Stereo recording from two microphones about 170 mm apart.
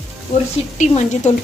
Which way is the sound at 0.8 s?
40° left (ahead or behind).